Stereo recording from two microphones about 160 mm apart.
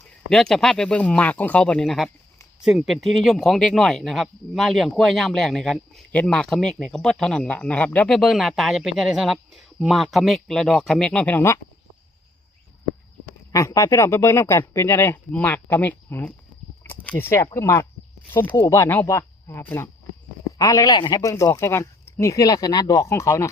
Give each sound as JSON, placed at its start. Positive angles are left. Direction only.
{"t": 0.3, "sound": "speech", "side_deg": 5}
{"t": 13.5, "sound": "speech", "side_deg": 20}